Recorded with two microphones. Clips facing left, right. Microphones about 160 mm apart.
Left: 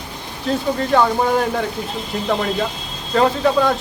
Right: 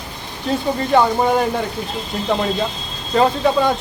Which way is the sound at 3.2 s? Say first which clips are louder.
Even; centre (ahead or behind).